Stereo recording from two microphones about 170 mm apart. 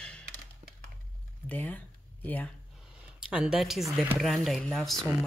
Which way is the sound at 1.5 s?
10° left (ahead or behind).